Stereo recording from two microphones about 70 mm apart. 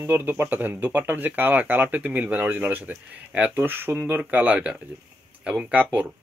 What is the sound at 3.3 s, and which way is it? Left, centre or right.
Speech, centre.